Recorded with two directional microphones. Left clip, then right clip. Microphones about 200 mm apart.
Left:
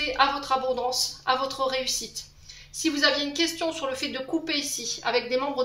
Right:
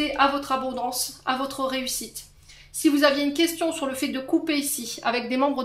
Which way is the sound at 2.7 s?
45° right (ahead or behind).